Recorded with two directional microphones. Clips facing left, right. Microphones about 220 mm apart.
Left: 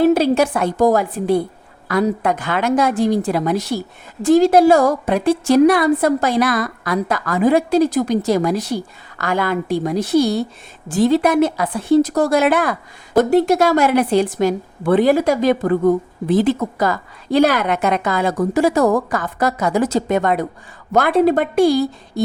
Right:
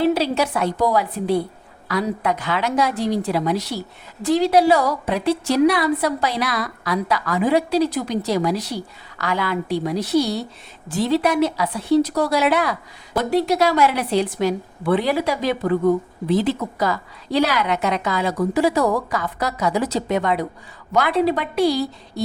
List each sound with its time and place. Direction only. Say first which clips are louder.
0.0 s a woman's voice: left 5 dB; 50° left (ahead or behind)